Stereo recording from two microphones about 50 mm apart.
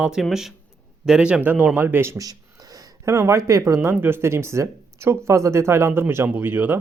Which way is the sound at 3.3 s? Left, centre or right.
Right.